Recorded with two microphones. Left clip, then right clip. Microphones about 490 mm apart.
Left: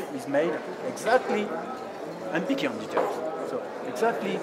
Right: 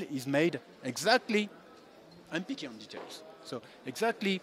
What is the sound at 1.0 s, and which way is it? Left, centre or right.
Speech, right.